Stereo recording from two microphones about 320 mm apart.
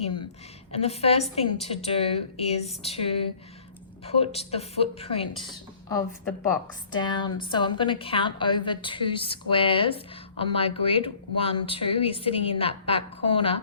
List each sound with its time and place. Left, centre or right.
0.0 s a woman's voice: centre
6.9 s speech: centre